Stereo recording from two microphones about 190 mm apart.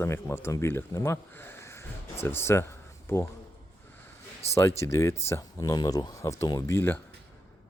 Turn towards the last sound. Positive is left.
turn(degrees=10)  # may be behind; listen again after turning